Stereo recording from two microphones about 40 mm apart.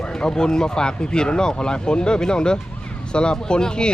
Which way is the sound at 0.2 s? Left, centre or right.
Centre.